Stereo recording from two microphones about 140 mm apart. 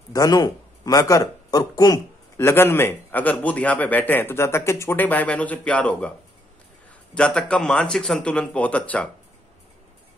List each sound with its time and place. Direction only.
0.1 s speech: 25° left (ahead or behind); by 6.1 s 10° left (ahead or behind)
7.2 s speech: 10° left (ahead or behind)